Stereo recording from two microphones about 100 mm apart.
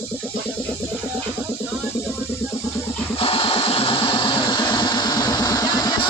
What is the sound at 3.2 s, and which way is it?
Vehicle, 65° left (ahead or behind).